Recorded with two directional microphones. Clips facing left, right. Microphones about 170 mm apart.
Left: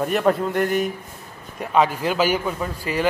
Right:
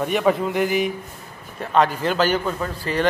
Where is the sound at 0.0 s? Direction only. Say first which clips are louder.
Even; centre (ahead or behind).